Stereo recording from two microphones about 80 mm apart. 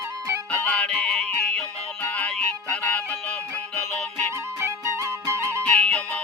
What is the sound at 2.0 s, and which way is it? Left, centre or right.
Music, centre.